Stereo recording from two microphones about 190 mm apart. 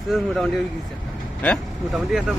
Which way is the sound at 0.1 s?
Centre (ahead or behind).